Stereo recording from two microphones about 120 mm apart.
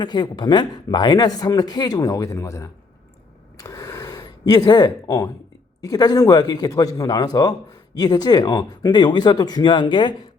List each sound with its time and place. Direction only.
0.0 s speech: 40° left (ahead or behind)
3.6 s a sound: 30° left (ahead or behind)
5.0 s speech: 25° left (ahead or behind); by 10.2 s 45° left (ahead or behind)